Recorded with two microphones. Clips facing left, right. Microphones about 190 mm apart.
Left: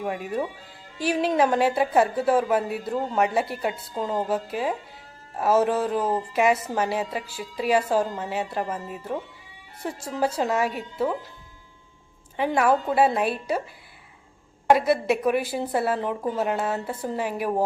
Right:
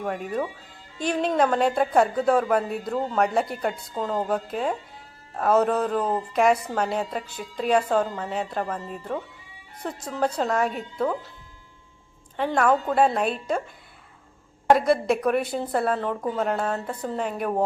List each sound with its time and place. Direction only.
0.0 s a woman's voice: 5° left (ahead or behind)
12.5 s a woman's voice: 5° left (ahead or behind)
14.7 s a woman's voice: 5° left (ahead or behind)